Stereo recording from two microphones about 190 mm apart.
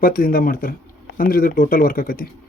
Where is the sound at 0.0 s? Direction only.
45° left (ahead or behind).